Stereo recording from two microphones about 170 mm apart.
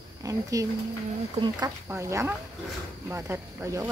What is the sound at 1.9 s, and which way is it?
Speech, 15° right (ahead or behind).